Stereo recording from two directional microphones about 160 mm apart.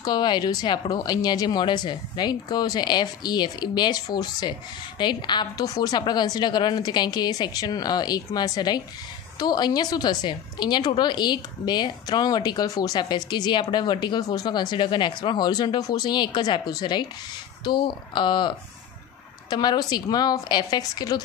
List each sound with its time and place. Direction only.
0.0 s speech: 25° left (ahead or behind)
19.5 s speech: 25° left (ahead or behind)